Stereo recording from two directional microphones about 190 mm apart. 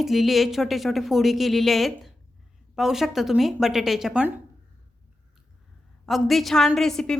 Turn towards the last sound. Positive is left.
turn(degrees=0)  # may be behind; listen again after turning